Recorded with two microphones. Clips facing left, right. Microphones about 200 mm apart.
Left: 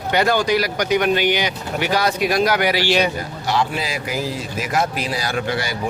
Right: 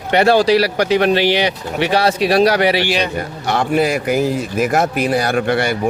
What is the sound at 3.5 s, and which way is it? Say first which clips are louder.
A man's voice: right 6 dB; 55° right (ahead or behind).